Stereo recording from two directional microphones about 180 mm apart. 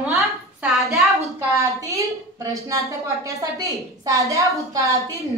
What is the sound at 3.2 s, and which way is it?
A woman's voice, 20° right (ahead or behind).